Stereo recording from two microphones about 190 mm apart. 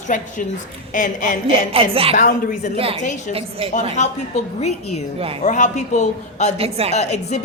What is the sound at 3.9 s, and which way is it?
A woman's voice, 35° left (ahead or behind).